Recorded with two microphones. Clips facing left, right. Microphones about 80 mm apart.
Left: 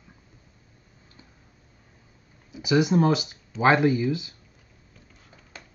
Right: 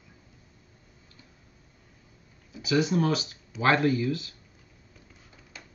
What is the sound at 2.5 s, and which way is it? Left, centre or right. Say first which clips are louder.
Speech: left 4 dB; centre.